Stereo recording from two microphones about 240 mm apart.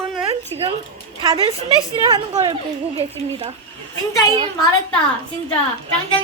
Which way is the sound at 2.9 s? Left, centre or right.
Centre.